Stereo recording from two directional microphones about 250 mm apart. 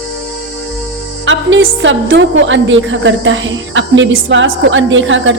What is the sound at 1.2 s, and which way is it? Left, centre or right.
A woman's voice, right.